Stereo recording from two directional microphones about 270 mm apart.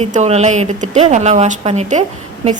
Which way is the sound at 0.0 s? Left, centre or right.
Right.